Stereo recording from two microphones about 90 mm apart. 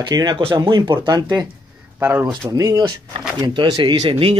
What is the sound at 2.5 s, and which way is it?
Speech, 40° right (ahead or behind).